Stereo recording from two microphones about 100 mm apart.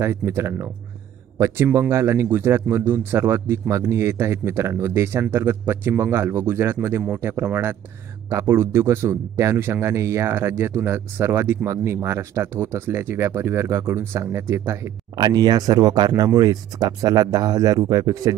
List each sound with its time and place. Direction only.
0.0 s speech: 25° right (ahead or behind)
15.1 s speech: 45° right (ahead or behind)